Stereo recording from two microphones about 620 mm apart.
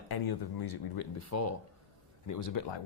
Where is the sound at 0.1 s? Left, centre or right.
Left.